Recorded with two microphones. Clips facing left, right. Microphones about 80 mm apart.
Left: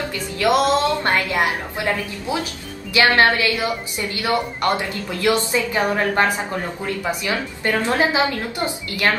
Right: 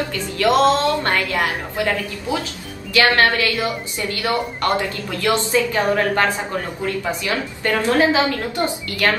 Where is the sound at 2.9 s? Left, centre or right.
Left.